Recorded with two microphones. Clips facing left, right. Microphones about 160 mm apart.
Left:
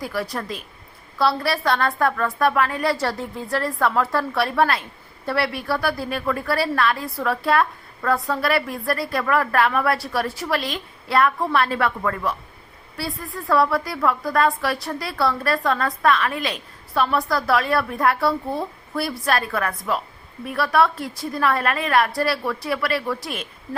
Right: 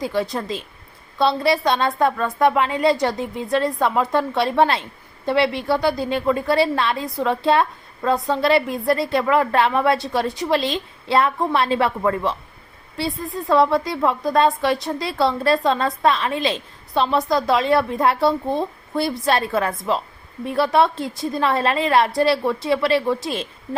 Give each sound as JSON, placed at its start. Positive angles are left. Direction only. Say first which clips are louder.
{"t": 0.0, "sound": "a woman's voice", "louder": "right 4 dB", "side_deg": -20}